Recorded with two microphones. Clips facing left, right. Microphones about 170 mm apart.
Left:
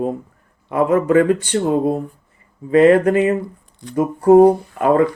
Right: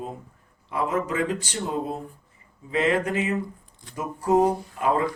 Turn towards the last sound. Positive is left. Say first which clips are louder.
# left 9 dB
turn(degrees=60)  # may be behind; listen again after turning